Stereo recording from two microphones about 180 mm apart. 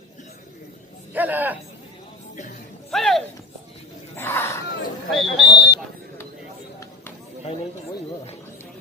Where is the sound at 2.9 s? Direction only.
Centre (ahead or behind).